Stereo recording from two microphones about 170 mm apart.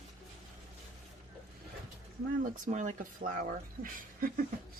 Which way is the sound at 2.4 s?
45° right (ahead or behind).